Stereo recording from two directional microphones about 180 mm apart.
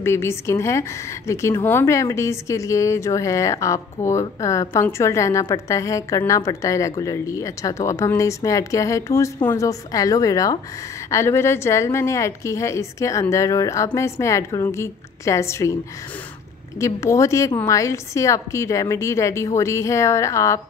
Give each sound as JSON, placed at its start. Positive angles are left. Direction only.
{"t": 0.0, "sound": "a woman's voice", "side_deg": 15}
{"t": 16.8, "sound": "a woman's voice", "side_deg": 15}